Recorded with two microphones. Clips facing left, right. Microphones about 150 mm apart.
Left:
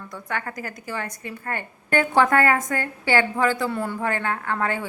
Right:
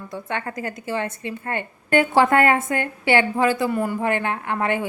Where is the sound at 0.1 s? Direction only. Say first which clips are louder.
Right 2 dB; 25° right (ahead or behind).